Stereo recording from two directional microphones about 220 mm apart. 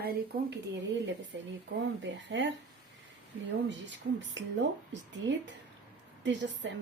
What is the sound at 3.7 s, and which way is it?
Speech, 55° right (ahead or behind).